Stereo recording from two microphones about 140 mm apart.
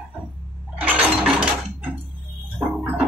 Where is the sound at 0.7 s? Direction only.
10° right (ahead or behind).